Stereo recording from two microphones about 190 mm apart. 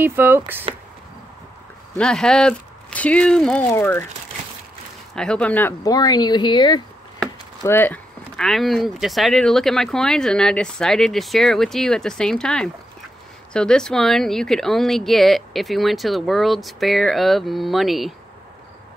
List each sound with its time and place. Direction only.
0.0 s speech: 10° right (ahead or behind)
0.7 s a sound: 30° right (ahead or behind)
2.0 s speech: 5° left (ahead or behind)
5.1 s speech: 5° left (ahead or behind); by 6.8 s 25° left (ahead or behind)
7.6 s speech: 10° left (ahead or behind)